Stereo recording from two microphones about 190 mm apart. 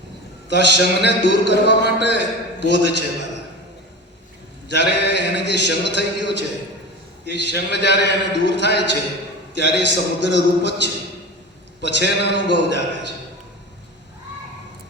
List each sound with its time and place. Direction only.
0.4 s a man's voice: 65° left (ahead or behind)
4.7 s a man's voice: 65° left (ahead or behind)